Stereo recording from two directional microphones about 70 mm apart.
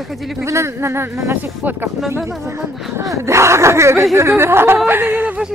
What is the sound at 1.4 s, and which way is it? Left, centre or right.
Speech, right.